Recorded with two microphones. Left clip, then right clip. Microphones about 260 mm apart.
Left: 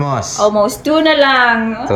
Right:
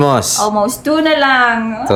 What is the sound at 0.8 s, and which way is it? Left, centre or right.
Speech, centre.